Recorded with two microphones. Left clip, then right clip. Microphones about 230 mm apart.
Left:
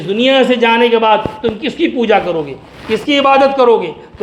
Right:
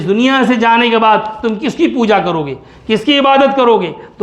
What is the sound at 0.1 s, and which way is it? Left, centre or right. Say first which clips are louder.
A man's voice: left 1 dB; right.